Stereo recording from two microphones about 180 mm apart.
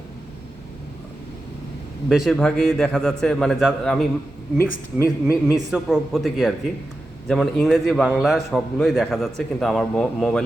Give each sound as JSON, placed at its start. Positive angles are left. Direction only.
{"t": 2.0, "sound": "speech", "side_deg": 0}
{"t": 4.9, "sound": "a man's voice", "side_deg": 15}
{"t": 5.7, "sound": "speech", "side_deg": 0}